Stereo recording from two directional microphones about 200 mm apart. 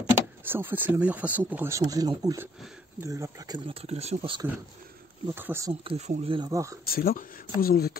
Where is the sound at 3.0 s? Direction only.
15° right (ahead or behind); by 4.4 s 30° right (ahead or behind).